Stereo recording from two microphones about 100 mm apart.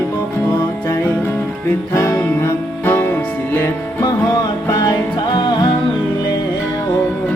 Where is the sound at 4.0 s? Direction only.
40° left (ahead or behind).